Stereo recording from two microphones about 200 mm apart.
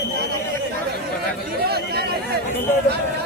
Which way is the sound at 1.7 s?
50° right (ahead or behind).